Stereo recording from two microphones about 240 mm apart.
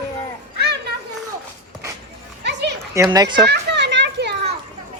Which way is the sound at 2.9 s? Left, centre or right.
Centre.